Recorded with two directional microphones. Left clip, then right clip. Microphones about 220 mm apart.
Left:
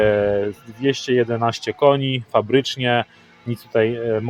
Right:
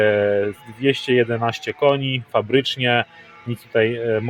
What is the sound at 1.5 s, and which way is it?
Speech, 15° left (ahead or behind).